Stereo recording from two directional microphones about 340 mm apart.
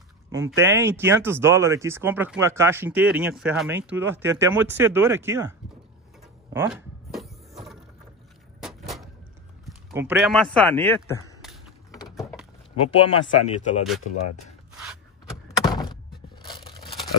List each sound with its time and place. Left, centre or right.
0.3 s speech: centre
6.5 s a sound: centre
8.6 s vehicle: centre
9.7 s speech: centre
12.2 s a sound: centre
12.9 s speech: centre
14.4 s a sound: centre
15.4 s door: centre
16.4 s tearing: centre